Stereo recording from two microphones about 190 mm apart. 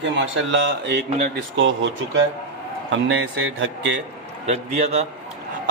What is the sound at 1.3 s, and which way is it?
Speech, 85° right.